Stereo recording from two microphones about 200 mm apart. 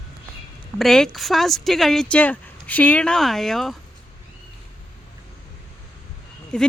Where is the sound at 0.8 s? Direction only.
Centre (ahead or behind).